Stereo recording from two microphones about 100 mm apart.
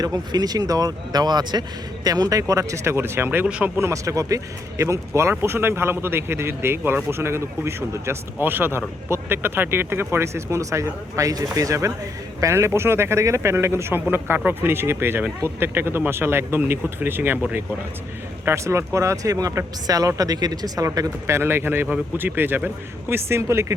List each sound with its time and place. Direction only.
0.0 s speech: 40° right (ahead or behind); by 3.4 s 20° right (ahead or behind)
3.4 s speech: 10° right (ahead or behind)
3.8 s speech: 30° right (ahead or behind)
18.4 s speech: 30° right (ahead or behind)